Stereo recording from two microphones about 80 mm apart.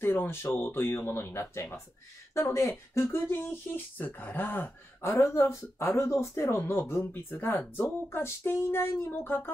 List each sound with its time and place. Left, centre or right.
0.0 s speech: left